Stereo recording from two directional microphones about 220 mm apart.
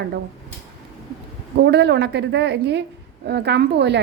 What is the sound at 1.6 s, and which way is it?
A woman's voice, 50° right (ahead or behind).